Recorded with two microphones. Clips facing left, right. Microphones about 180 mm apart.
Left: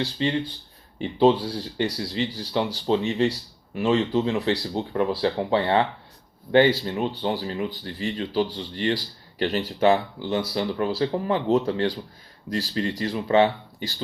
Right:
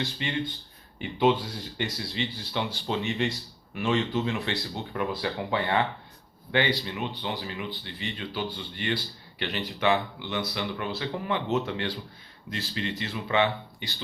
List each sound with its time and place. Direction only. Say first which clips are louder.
0.0 s speech: left 6 dB; 35° left (ahead or behind)